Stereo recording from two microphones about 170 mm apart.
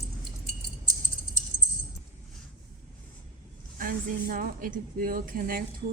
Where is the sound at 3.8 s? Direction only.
55° right (ahead or behind).